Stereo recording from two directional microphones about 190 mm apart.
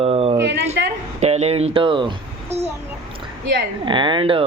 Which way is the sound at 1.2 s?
35° right (ahead or behind).